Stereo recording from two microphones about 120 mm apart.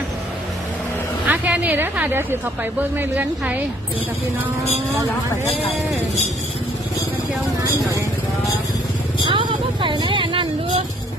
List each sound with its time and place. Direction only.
1.3 s a woman's voice: 10° right (ahead or behind)
9.2 s vehicle: 40° right (ahead or behind)